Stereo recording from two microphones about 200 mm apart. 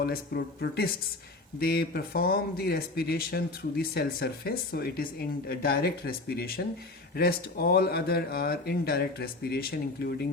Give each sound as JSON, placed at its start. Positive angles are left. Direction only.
{"t": 0.0, "sound": "speech", "side_deg": 50}